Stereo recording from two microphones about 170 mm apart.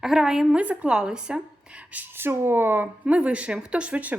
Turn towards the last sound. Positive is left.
turn(degrees=-10)  # may be behind; listen again after turning